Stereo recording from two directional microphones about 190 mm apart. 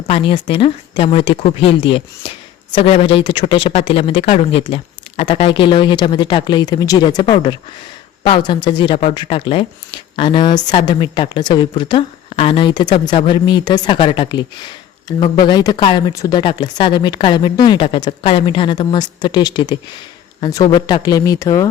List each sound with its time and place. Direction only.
0.1 s a man's voice: 30° left (ahead or behind)